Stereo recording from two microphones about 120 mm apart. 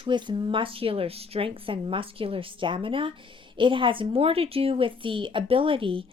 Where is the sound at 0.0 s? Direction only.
40° right (ahead or behind).